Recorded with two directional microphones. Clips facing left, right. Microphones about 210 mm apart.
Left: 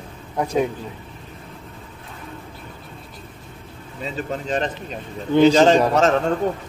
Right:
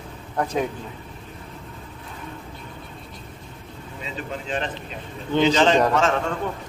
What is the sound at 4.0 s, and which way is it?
Speech, 40° left (ahead or behind).